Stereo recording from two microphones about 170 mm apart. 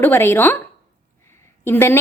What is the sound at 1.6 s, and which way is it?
Speech, 15° left (ahead or behind).